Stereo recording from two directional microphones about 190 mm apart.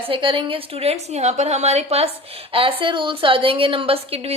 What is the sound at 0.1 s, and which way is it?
A woman's voice, 25° right (ahead or behind).